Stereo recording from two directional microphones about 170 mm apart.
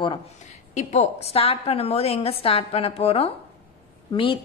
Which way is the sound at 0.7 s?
40° left (ahead or behind).